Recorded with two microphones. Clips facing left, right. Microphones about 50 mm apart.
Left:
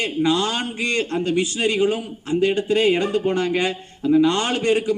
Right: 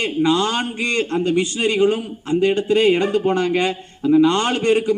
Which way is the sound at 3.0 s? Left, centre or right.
Centre.